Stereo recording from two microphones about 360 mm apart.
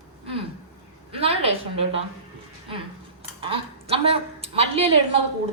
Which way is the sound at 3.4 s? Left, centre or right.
Centre.